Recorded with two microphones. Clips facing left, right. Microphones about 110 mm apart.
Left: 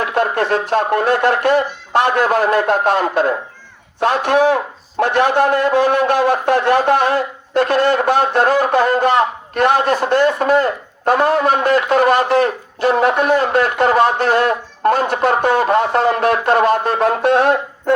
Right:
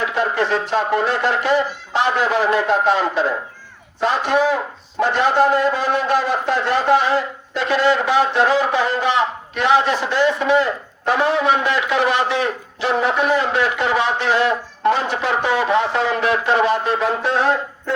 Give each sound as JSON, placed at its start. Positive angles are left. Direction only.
{"t": 0.0, "sound": "speech", "side_deg": 55}